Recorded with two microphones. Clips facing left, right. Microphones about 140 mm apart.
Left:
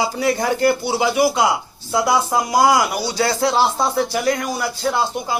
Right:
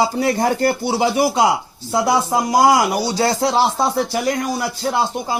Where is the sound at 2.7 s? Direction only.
35° right (ahead or behind).